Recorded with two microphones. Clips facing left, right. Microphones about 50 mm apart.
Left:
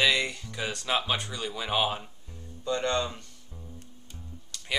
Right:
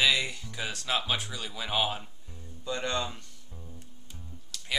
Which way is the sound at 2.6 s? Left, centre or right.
Centre.